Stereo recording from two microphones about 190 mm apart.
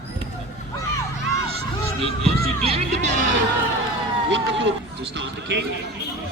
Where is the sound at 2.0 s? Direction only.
30° right (ahead or behind).